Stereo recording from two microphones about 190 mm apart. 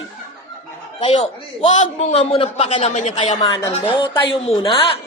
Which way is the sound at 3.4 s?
20° left (ahead or behind).